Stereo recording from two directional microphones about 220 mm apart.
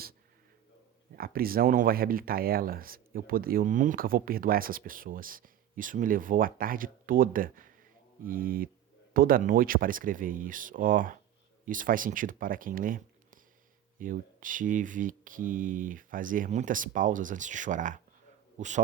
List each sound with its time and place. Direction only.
1.1 s speech: 40° right (ahead or behind)